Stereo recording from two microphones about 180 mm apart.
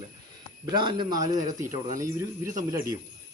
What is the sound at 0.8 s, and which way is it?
Speech, 25° right (ahead or behind).